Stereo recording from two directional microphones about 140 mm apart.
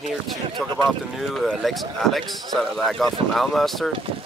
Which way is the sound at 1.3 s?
Centre (ahead or behind).